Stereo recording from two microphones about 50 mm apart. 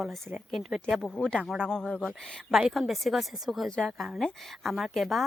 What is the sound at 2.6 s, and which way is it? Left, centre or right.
Speech, centre.